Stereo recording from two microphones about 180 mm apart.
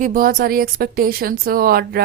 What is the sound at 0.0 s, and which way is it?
A woman's voice, 50° right (ahead or behind).